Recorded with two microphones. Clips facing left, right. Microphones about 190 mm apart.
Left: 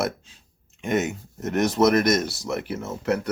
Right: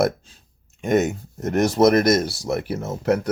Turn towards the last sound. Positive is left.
turn(degrees=-45)  # may be behind; listen again after turning